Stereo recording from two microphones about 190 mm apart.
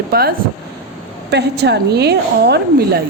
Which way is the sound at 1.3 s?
60° right (ahead or behind).